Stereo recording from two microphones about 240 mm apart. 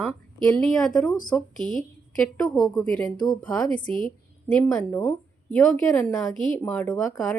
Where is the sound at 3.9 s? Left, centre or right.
Left.